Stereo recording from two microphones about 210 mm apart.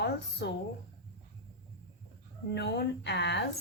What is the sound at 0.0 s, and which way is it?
Speech, 50° left (ahead or behind).